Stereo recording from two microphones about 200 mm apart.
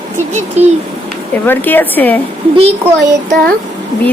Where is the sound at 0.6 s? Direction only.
35° right (ahead or behind).